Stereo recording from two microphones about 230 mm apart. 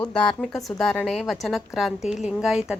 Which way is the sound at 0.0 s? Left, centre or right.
Centre.